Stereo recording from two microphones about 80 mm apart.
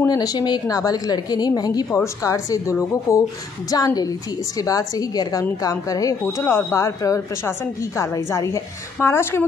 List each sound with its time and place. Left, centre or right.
0.1 s a woman's voice: left
2.2 s a woman's voice: left
3.7 s a woman's voice: left
6.4 s speech: left
6.8 s a woman's voice: left